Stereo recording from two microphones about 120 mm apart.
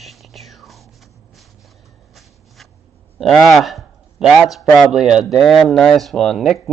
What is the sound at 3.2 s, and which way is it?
A man's voice, centre (ahead or behind).